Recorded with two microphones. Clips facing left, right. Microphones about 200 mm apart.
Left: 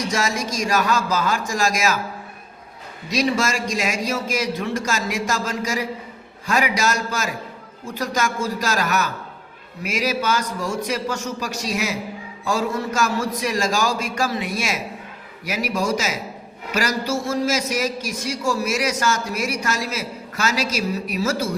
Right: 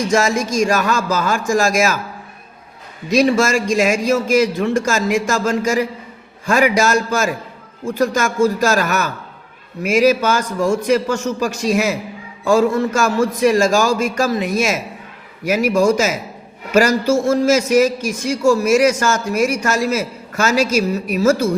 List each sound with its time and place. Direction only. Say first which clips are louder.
0.1 s a man's voice: right 7 dB; 50° right (ahead or behind)
3.1 s a man's voice: right 7 dB; 50° right (ahead or behind)